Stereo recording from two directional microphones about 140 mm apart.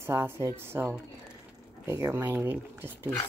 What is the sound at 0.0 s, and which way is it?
Speech, 15° right (ahead or behind).